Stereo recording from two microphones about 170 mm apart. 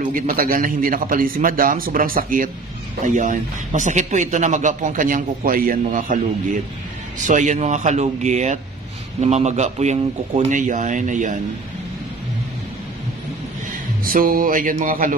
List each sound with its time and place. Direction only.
0.0 s speech: 55° right (ahead or behind)
7.2 s speech: 45° right (ahead or behind)
14.0 s speech: 55° right (ahead or behind)